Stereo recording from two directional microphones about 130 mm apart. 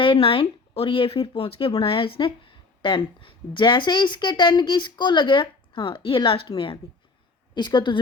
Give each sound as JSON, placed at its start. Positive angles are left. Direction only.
{"t": 0.0, "sound": "speech", "side_deg": 40}